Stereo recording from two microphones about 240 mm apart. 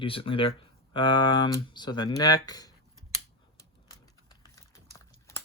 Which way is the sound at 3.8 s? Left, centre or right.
Centre.